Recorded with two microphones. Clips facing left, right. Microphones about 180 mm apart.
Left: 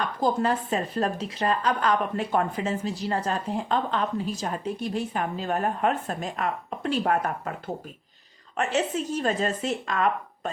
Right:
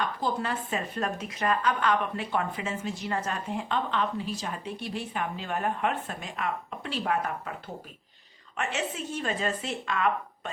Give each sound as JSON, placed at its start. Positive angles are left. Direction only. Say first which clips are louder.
{"t": 0.2, "sound": "a woman's voice", "louder": "left 6 dB", "side_deg": 40}
{"t": 8.5, "sound": "a woman's voice", "louder": "left 6 dB", "side_deg": 40}